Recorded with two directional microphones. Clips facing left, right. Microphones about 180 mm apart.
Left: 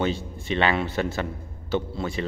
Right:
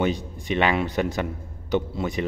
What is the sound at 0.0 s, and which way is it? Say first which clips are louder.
A man's voice: right 2 dB; 15° right (ahead or behind).